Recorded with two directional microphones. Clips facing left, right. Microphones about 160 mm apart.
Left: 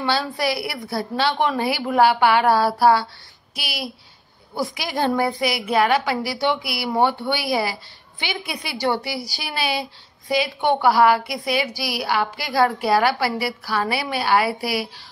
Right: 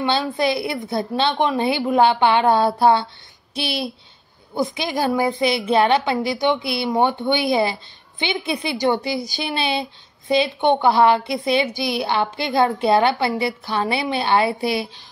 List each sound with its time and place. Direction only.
0.0 s a woman's voice: 20° right (ahead or behind)
5.4 s a woman's voice: 25° right (ahead or behind)